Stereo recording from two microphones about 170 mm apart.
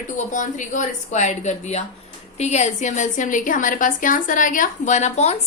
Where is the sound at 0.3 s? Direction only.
45° left (ahead or behind).